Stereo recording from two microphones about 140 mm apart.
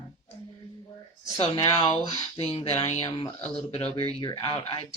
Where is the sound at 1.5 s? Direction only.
30° left (ahead or behind).